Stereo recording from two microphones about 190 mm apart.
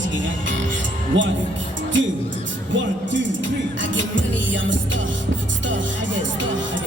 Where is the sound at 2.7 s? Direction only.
75° right (ahead or behind).